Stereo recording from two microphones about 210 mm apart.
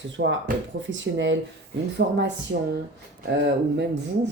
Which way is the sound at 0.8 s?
60° right (ahead or behind).